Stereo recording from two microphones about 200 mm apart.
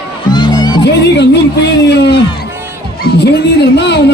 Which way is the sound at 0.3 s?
20° left (ahead or behind).